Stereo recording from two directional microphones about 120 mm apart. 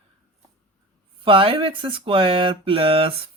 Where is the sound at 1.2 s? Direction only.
50° right (ahead or behind).